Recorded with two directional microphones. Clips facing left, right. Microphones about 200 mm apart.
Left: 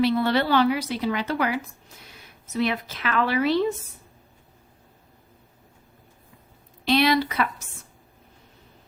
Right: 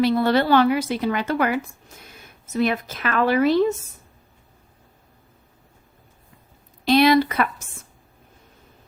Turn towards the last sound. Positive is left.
turn(degrees=-50)  # may be behind; listen again after turning